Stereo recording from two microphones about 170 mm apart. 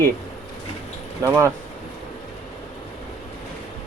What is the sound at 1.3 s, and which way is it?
Speech, 15° right (ahead or behind).